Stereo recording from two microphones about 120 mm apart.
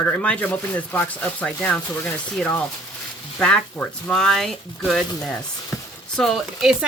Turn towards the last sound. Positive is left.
turn(degrees=0)  # may be behind; listen again after turning